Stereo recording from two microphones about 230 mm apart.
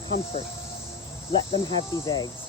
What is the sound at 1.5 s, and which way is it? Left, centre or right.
Speech, centre.